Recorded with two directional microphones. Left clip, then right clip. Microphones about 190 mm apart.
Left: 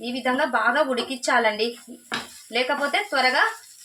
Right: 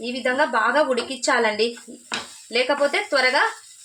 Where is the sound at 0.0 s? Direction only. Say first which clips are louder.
Right 2 dB; 25° right (ahead or behind).